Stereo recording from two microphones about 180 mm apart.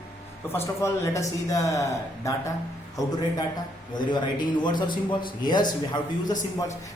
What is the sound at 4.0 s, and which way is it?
A man's voice, 25° left (ahead or behind).